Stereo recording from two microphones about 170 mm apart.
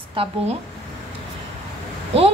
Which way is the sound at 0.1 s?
35° right (ahead or behind).